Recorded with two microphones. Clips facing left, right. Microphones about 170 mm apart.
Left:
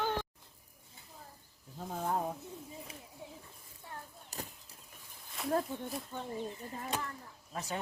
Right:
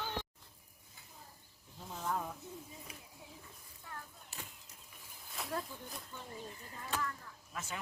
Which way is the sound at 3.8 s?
35° left (ahead or behind).